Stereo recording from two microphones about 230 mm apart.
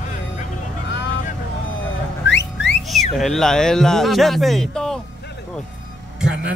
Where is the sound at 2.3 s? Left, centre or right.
Left.